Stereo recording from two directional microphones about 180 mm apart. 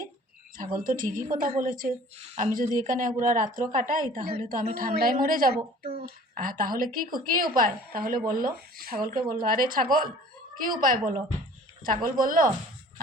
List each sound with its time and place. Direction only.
0.5 s speech: 50° right (ahead or behind)